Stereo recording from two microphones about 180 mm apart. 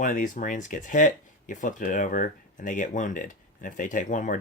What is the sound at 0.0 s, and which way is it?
Speech, 45° left (ahead or behind).